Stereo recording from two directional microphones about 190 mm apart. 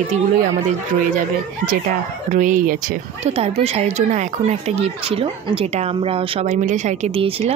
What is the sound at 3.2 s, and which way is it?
Speech, 30° right (ahead or behind).